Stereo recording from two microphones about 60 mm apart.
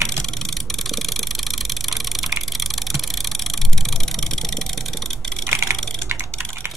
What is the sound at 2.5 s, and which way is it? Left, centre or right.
Computer keyboard, centre.